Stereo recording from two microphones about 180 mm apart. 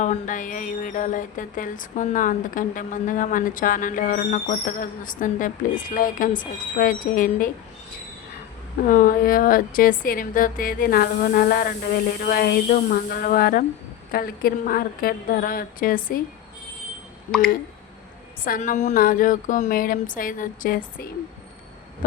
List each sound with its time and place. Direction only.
0.0 s speech: 45° left (ahead or behind)
8.9 s speech: 50° left (ahead or behind)
18.4 s speech: 50° left (ahead or behind)